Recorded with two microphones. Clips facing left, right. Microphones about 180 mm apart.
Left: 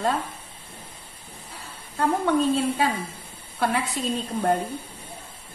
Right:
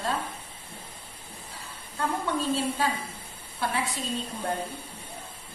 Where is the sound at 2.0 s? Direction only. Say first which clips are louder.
Left 7 dB; 65° left (ahead or behind).